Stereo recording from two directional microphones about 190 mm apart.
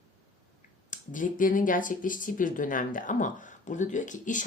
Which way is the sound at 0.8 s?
45° left (ahead or behind).